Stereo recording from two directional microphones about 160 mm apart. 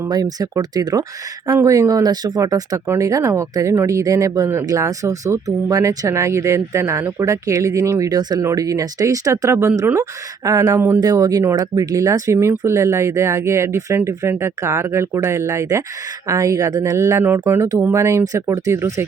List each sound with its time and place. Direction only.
0.1 s speech: 25° right (ahead or behind)